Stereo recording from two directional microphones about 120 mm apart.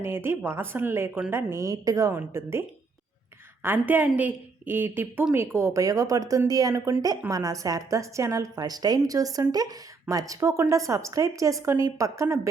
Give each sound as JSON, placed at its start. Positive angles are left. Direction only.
{"t": 0.0, "sound": "a woman's voice", "side_deg": -20}